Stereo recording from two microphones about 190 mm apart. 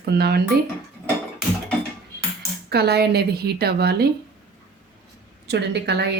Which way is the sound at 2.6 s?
60° right (ahead or behind).